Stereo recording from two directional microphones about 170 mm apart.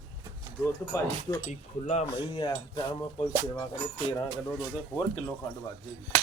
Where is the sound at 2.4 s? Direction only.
25° left (ahead or behind).